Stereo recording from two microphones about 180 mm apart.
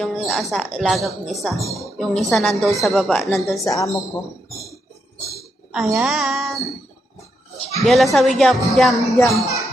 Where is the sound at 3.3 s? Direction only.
15° left (ahead or behind).